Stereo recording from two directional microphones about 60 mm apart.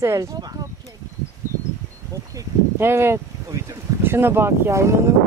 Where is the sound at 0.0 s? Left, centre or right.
Right.